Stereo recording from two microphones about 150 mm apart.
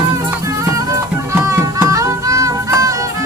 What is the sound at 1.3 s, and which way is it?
Music, 20° right (ahead or behind).